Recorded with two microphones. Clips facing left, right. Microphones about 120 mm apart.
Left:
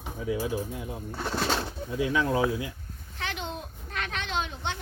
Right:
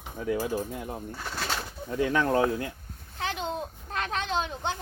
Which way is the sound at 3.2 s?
35° right (ahead or behind).